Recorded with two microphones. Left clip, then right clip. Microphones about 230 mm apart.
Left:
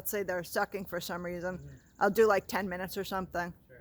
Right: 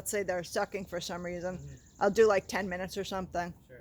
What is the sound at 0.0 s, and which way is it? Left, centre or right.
Speech, centre.